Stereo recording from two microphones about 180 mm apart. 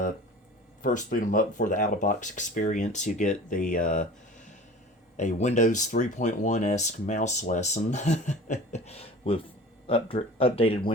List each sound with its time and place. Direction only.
0.8 s speech: 50° left (ahead or behind)
5.1 s speech: 40° left (ahead or behind)